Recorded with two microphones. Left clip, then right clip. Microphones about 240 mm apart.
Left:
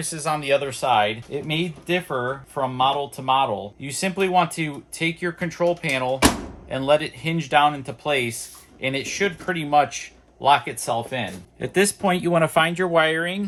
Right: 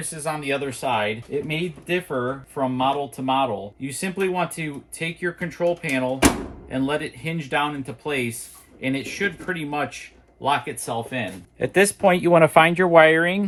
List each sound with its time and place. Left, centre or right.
0.1 s speech: centre
11.6 s speech: centre